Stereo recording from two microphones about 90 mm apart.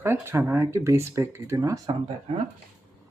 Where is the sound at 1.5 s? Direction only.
40° right (ahead or behind).